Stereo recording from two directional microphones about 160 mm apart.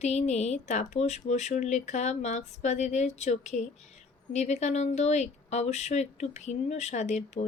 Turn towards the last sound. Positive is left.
turn(degrees=45)  # may be behind; listen again after turning